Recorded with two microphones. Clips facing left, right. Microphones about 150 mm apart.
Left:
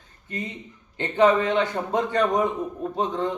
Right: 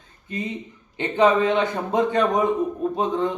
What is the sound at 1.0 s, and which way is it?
A man's voice, 20° right (ahead or behind).